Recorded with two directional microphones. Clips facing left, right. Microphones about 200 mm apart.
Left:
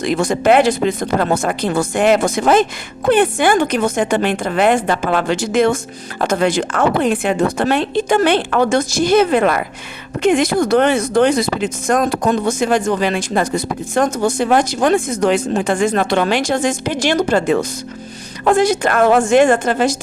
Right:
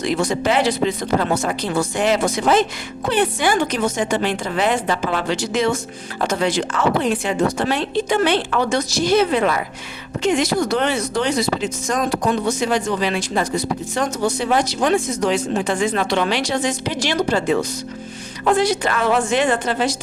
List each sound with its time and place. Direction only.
0.0 s a woman's voice: 50° left (ahead or behind)